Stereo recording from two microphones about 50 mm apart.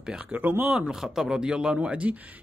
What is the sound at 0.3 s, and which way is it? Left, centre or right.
Speech, right.